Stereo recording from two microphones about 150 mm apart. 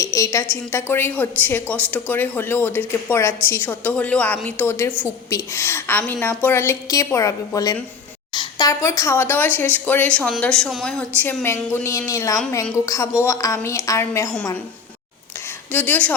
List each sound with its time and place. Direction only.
0.0 s a woman's voice: 20° left (ahead or behind)
15.7 s a woman's voice: 10° left (ahead or behind)